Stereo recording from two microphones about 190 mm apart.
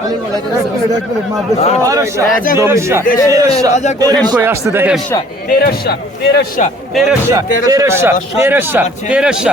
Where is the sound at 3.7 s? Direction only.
35° left (ahead or behind).